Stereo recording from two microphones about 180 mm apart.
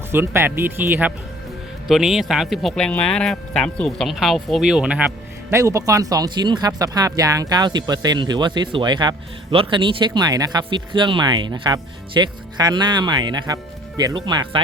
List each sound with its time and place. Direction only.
0.1 s speech: 15° right (ahead or behind)